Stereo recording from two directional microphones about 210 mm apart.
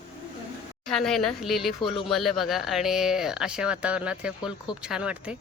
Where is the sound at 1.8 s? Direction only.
25° left (ahead or behind).